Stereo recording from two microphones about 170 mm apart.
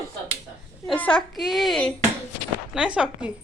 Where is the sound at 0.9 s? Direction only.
10° left (ahead or behind).